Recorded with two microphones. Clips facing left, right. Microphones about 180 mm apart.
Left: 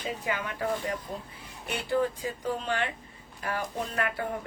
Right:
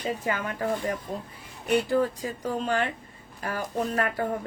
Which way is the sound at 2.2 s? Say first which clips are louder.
Right 2 dB; 40° right (ahead or behind).